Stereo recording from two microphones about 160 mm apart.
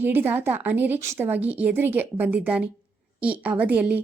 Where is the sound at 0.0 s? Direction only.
10° right (ahead or behind).